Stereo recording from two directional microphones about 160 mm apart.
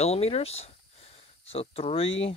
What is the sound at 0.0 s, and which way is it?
Speech, 40° left (ahead or behind).